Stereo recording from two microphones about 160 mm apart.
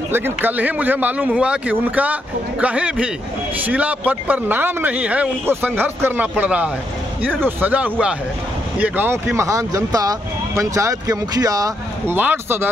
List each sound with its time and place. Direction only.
0.1 s speech: 10° right (ahead or behind)